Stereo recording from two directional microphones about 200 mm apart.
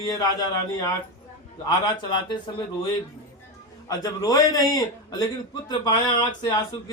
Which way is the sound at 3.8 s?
15° left (ahead or behind).